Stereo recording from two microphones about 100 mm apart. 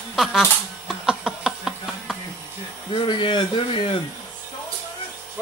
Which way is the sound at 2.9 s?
55° left (ahead or behind).